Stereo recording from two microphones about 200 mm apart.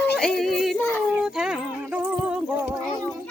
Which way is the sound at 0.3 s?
Centre (ahead or behind).